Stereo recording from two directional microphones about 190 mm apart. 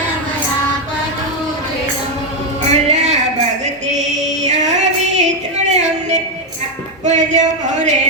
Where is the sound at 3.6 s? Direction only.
40° right (ahead or behind).